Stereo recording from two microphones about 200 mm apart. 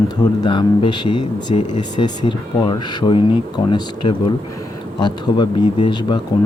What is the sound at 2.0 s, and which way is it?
Speech, 20° left (ahead or behind).